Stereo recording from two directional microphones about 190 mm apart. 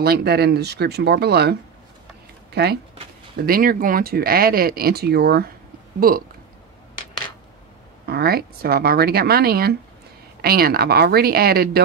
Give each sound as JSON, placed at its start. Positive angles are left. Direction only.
{"t": 0.0, "sound": "speech", "side_deg": -55}
{"t": 8.1, "sound": "speech", "side_deg": -55}